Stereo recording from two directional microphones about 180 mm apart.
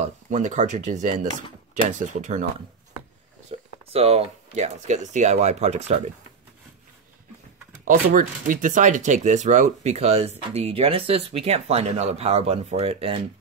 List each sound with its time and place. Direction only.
0.3 s speech: 40° right (ahead or behind)
3.5 s a sound: 35° right (ahead or behind)
3.9 s speech: 35° right (ahead or behind)
7.8 s speech: 45° right (ahead or behind); by 13.2 s 30° right (ahead or behind)